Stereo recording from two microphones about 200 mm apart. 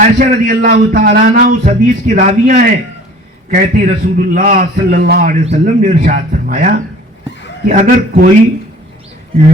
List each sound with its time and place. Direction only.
0.0 s a man's voice: 40° right (ahead or behind)
5.5 s speech: 40° right (ahead or behind)